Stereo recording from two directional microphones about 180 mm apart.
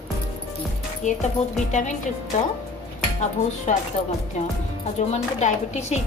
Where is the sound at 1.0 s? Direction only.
40° left (ahead or behind).